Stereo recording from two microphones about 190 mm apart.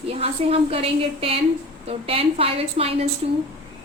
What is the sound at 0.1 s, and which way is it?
A woman's voice, 30° right (ahead or behind).